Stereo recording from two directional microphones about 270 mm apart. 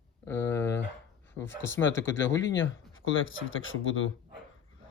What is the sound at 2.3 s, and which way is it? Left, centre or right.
Speech, centre.